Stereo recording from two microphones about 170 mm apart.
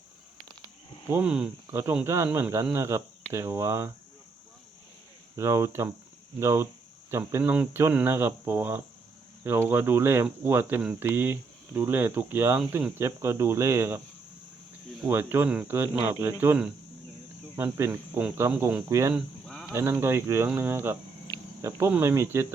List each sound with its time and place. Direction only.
1.1 s speech: 5° right (ahead or behind)
5.4 s speech: 15° right (ahead or behind)
19.1 s livestock: centre (ahead or behind)
19.7 s speech: 15° right (ahead or behind)